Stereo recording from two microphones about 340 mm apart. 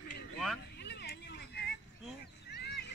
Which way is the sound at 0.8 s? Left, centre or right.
Left.